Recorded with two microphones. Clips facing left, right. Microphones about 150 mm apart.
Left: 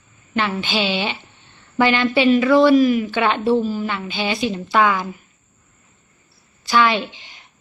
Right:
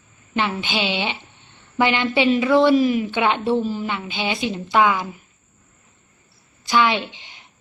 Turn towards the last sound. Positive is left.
turn(degrees=-20)  # may be behind; listen again after turning